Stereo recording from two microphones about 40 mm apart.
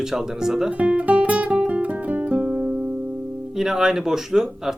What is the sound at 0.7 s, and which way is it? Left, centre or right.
Guitar, right.